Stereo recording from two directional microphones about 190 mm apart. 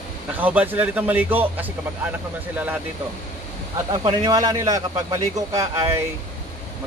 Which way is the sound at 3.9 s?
20° right (ahead or behind).